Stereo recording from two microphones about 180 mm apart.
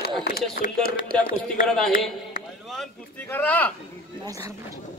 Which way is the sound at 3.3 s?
10° left (ahead or behind).